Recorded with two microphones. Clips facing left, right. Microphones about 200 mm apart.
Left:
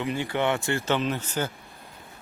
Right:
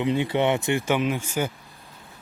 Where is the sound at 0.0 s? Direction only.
20° right (ahead or behind).